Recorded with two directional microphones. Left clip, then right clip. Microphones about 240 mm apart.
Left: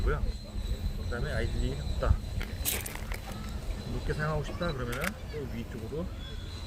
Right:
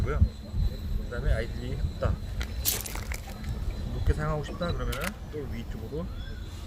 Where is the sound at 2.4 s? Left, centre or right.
Centre.